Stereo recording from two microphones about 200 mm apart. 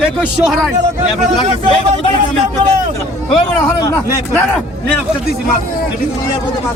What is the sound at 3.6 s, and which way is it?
Speech, 15° left (ahead or behind).